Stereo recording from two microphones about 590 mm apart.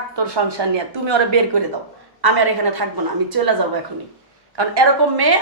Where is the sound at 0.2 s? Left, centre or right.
Right.